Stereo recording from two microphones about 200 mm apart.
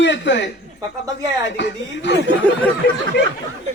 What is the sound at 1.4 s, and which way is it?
Speech, 65° left (ahead or behind).